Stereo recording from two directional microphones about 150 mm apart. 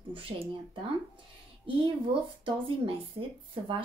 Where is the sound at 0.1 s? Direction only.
35° right (ahead or behind).